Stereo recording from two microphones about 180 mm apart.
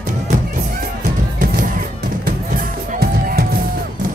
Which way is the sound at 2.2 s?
55° right (ahead or behind).